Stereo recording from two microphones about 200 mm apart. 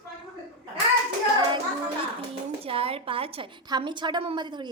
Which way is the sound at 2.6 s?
30° right (ahead or behind).